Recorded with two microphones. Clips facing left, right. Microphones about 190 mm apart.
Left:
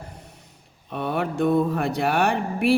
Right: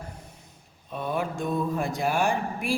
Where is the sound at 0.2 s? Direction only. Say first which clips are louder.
Left 1 dB; 65° left (ahead or behind).